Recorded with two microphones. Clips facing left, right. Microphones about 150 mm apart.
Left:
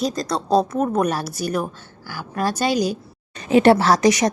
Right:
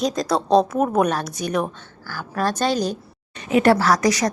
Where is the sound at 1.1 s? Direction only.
5° left (ahead or behind).